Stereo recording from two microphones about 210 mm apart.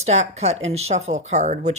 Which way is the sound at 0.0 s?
30° right (ahead or behind).